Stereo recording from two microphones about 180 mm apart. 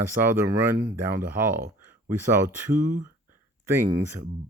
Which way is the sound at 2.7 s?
45° right (ahead or behind).